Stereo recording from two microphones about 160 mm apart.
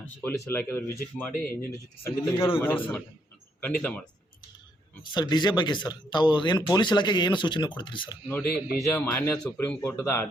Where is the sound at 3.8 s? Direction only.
10° left (ahead or behind).